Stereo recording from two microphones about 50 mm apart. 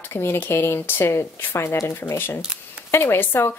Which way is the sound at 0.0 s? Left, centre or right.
Left.